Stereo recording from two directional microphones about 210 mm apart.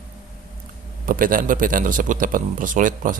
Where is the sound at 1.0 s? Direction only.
40° right (ahead or behind).